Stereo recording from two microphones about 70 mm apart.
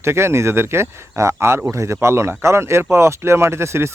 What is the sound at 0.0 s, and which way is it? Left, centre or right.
Speech, right.